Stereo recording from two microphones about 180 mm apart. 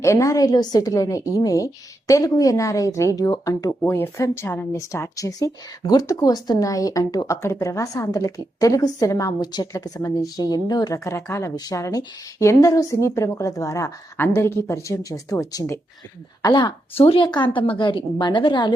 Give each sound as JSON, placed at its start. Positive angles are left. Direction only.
{"t": 0.0, "sound": "a woman's voice", "side_deg": 15}